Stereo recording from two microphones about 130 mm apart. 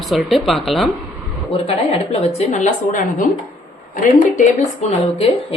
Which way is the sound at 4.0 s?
90° left.